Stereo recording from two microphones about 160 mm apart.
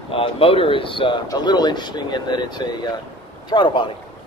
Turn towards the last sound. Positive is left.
turn(degrees=30)  # may be behind; listen again after turning